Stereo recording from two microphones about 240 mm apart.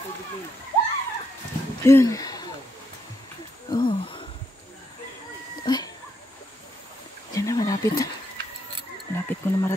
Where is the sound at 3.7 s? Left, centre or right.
Centre.